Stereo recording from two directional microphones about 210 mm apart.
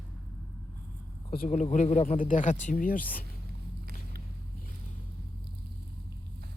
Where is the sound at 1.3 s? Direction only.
40° left (ahead or behind).